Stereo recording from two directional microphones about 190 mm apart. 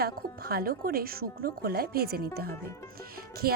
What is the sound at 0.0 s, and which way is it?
A woman's voice, 55° right (ahead or behind).